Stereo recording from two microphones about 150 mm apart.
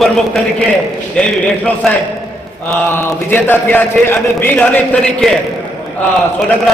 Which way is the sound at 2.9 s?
15° left (ahead or behind).